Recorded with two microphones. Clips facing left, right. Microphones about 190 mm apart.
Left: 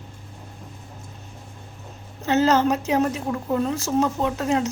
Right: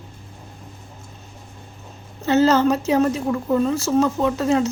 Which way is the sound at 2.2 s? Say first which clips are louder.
Right 3 dB; 10° left (ahead or behind).